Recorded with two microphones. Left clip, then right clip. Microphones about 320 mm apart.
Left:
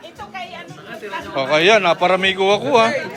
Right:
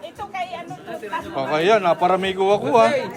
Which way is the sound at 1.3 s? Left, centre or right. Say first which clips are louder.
Left 4 dB; centre.